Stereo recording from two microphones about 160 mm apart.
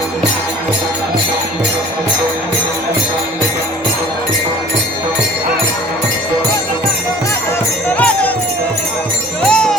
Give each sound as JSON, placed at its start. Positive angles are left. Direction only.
{"t": 7.9, "sound": "music", "side_deg": 10}
{"t": 9.5, "sound": "music", "side_deg": 5}